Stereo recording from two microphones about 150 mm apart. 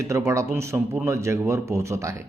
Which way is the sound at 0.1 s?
20° right (ahead or behind).